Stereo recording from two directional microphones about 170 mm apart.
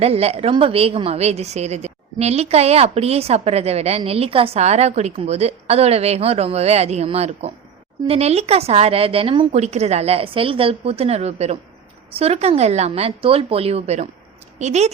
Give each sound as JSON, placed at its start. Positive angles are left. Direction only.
{"t": 0.0, "sound": "a woman's voice", "side_deg": -35}